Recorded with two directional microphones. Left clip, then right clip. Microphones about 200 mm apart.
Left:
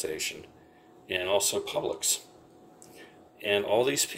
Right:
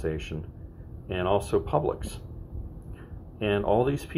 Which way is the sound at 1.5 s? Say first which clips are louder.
Right 6 dB; 35° left (ahead or behind).